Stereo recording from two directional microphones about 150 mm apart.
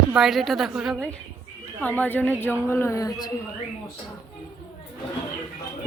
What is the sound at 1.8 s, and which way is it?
Speech, 10° left (ahead or behind).